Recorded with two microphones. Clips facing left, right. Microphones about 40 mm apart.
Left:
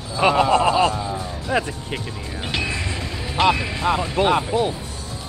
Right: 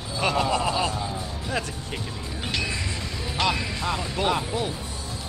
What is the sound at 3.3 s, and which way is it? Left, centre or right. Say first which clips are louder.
Speech: left 7 dB; left.